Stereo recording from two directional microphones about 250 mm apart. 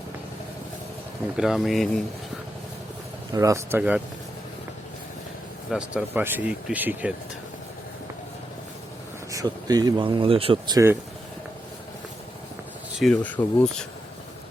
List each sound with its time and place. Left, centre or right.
1.4 s speech: centre
3.3 s speech: centre
5.7 s speech: centre
9.3 s speech: centre
13.0 s speech: centre